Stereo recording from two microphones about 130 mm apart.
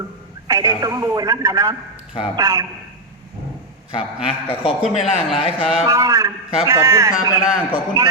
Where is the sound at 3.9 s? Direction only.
45° left (ahead or behind).